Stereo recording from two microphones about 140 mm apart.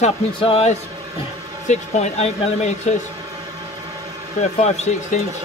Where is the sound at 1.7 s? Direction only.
55° left (ahead or behind).